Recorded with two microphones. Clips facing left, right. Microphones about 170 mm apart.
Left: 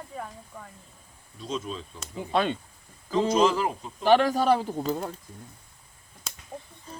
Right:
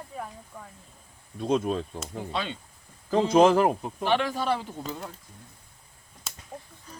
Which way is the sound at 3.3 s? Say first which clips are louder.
Right 6 dB; 55° right (ahead or behind).